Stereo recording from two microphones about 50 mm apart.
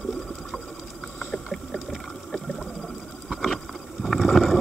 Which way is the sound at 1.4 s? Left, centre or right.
Centre.